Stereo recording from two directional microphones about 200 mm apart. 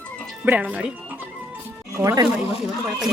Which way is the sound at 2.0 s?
15° right (ahead or behind).